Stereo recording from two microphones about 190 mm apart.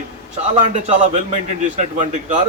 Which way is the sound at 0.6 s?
35° right (ahead or behind).